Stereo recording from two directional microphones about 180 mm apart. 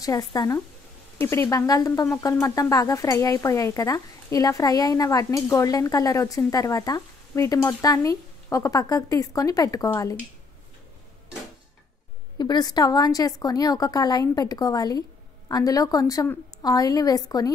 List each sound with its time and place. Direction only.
0.0 s speech: 20° left (ahead or behind)
12.4 s speech: 25° left (ahead or behind)